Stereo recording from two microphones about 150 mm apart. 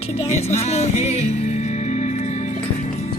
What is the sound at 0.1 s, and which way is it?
Music, 45° left (ahead or behind).